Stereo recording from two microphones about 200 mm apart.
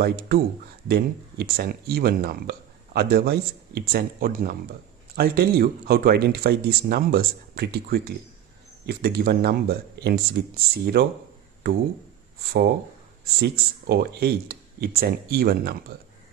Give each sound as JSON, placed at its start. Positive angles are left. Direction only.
{"t": 0.0, "sound": "speech", "side_deg": -50}
{"t": 13.4, "sound": "speech", "side_deg": -55}